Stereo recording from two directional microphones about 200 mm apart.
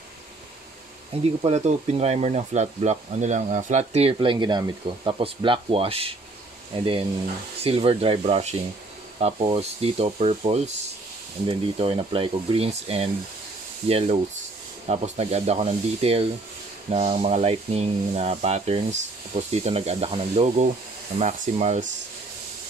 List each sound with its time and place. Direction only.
1.4 s speech: 35° right (ahead or behind)